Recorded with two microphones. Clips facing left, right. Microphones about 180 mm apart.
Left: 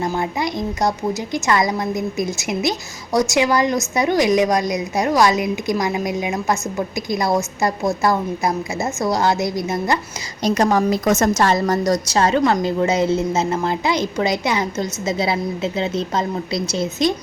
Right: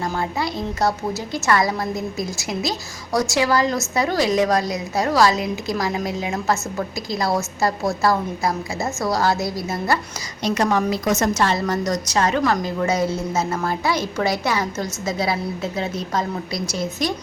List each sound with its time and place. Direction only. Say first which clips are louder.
0.1 s a woman's voice: left 2 dB; 15° left (ahead or behind)
10.4 s a woman's voice: left 3 dB; 40° left (ahead or behind); by 17.2 s 25° left (ahead or behind)